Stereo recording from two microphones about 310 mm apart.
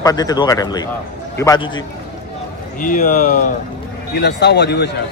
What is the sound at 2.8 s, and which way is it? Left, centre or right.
Speech, left.